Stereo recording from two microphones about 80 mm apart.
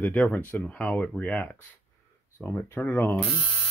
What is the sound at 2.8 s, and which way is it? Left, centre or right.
Speech, left.